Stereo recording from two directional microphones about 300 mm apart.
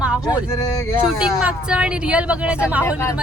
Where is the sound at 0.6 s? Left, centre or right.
Centre.